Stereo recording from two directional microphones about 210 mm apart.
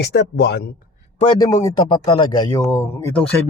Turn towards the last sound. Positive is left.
turn(degrees=10)  # may be behind; listen again after turning